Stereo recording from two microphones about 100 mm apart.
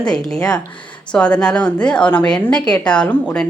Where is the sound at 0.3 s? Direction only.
10° left (ahead or behind).